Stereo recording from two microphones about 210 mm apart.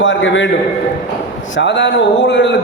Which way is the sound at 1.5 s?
55° left (ahead or behind).